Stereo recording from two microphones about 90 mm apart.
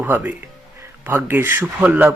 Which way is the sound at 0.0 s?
15° right (ahead or behind).